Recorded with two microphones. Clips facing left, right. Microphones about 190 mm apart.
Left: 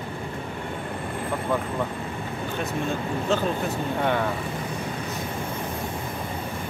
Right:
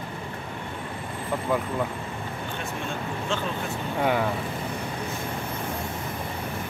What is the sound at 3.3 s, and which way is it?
Speech, 40° left (ahead or behind).